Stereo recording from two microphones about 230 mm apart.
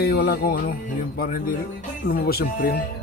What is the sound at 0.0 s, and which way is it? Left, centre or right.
Speech, left.